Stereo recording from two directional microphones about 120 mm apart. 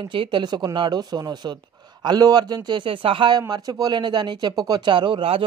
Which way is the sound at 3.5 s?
35° right (ahead or behind).